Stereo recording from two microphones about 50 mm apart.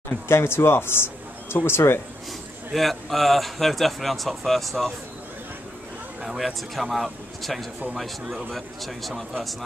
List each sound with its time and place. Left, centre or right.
0.3 s speech: left
2.7 s speech: centre
6.2 s speech: centre